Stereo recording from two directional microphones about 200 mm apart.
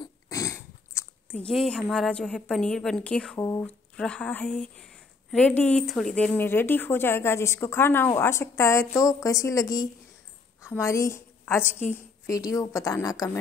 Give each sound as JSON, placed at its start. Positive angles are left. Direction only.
{"t": 0.0, "sound": "dog", "side_deg": 15}
{"t": 3.3, "sound": "a woman's voice", "side_deg": 15}